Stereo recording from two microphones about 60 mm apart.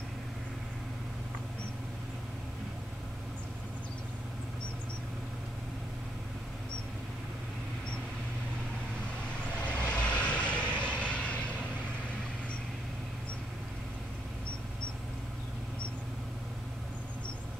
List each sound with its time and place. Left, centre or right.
9.7 s vehicle: left